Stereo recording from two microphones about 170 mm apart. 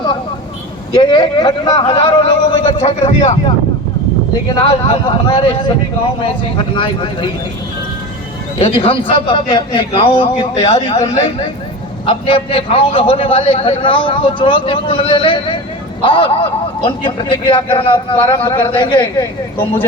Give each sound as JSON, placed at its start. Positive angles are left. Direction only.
{"t": 0.9, "sound": "speech", "side_deg": 30}
{"t": 4.6, "sound": "a man's voice", "side_deg": 30}
{"t": 6.7, "sound": "speech", "side_deg": 30}
{"t": 8.5, "sound": "a man's voice", "side_deg": 35}